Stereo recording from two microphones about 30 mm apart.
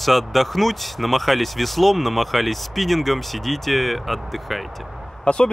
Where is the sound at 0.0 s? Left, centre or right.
Centre.